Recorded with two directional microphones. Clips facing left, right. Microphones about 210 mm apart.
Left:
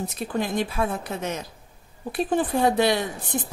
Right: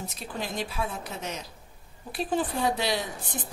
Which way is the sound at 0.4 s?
55° left (ahead or behind).